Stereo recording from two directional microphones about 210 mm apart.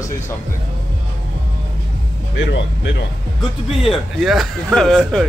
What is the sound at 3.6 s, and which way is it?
Speech, centre (ahead or behind).